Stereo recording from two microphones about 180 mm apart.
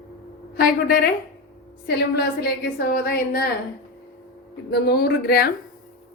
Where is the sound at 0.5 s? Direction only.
55° left (ahead or behind).